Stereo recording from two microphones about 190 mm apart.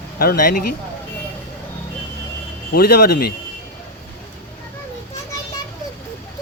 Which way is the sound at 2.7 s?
55° left (ahead or behind).